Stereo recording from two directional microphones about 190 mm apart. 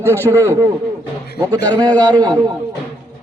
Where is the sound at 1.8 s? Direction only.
20° right (ahead or behind).